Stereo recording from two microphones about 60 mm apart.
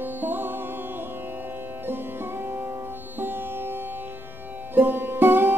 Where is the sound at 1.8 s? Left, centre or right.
Right.